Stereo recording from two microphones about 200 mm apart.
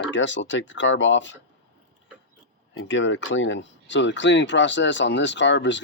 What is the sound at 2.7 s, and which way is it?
Speech, 65° left (ahead or behind).